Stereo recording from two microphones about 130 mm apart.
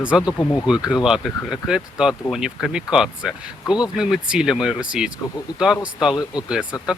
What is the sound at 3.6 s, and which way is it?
Speech, 30° left (ahead or behind).